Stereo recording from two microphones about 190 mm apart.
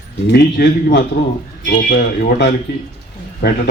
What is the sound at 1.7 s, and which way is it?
Speech, 45° left (ahead or behind).